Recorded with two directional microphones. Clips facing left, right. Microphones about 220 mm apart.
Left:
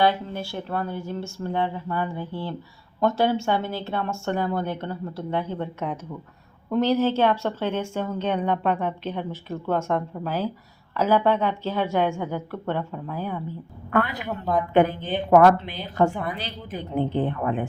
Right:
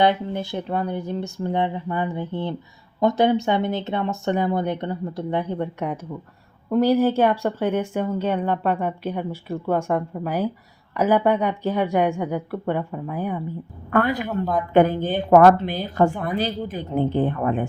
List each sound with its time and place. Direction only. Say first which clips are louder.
0.0 s speech: right 3 dB; 20° right (ahead or behind)
13.9 s a woman's voice: right 4 dB; 45° right (ahead or behind)
14.3 s a woman's voice: right 2 dB; centre (ahead or behind)
14.7 s a woman's voice: right 4 dB; 45° right (ahead or behind)